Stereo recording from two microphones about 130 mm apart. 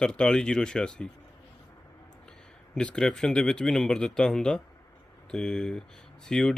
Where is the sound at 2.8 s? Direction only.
5° left (ahead or behind).